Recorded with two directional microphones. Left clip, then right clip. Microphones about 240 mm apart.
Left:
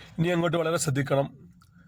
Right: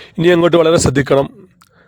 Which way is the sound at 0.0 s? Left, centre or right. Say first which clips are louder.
Right 15 dB; right.